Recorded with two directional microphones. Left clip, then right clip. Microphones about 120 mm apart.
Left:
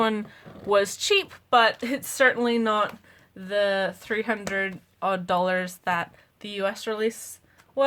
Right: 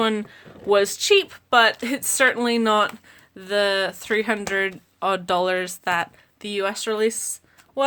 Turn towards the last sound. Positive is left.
turn(degrees=-40)  # may be behind; listen again after turning